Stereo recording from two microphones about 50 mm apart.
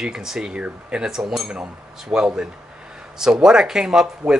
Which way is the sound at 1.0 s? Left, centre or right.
Centre.